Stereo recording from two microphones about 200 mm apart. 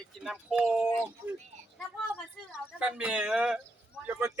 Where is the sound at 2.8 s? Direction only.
5° right (ahead or behind).